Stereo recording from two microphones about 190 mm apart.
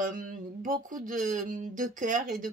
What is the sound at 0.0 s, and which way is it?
Speech, 45° right (ahead or behind).